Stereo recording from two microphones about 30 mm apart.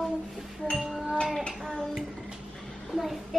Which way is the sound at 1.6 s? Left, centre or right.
Centre.